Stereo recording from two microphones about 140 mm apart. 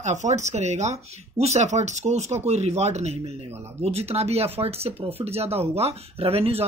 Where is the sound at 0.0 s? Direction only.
60° right (ahead or behind).